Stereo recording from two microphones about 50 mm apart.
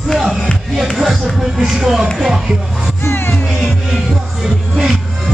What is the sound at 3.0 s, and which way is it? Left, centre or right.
Music, left.